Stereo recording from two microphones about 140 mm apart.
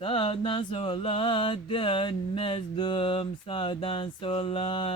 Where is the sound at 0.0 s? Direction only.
40° left (ahead or behind).